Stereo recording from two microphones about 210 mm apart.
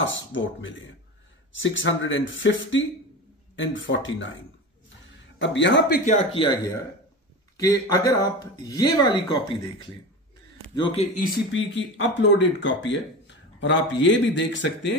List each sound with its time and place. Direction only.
0.0 s speech: 65° left (ahead or behind)
5.4 s speech: 60° left (ahead or behind)
6.3 s speech: 25° left (ahead or behind)
7.6 s speech: 15° left (ahead or behind)
11.5 s speech: 60° left (ahead or behind)